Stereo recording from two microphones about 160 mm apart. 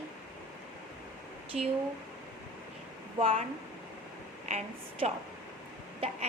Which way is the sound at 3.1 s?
35° right (ahead or behind).